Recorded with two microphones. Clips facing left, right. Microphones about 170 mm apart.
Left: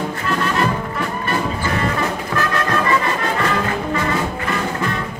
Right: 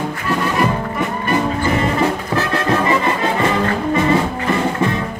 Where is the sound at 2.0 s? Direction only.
25° right (ahead or behind).